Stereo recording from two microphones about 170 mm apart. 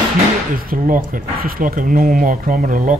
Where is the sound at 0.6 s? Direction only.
55° right (ahead or behind).